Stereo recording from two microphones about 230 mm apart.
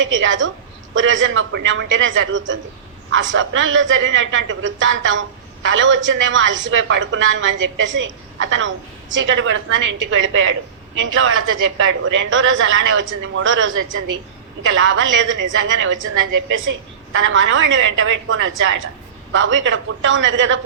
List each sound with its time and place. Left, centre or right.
0.0 s a woman's voice: right